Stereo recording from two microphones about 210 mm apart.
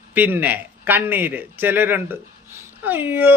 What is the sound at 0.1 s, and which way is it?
A man's voice, 10° right (ahead or behind).